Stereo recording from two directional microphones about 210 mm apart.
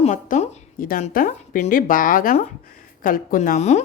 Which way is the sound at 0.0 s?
35° left (ahead or behind).